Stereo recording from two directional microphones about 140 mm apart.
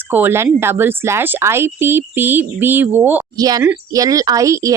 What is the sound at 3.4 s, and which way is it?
Speech, 25° right (ahead or behind).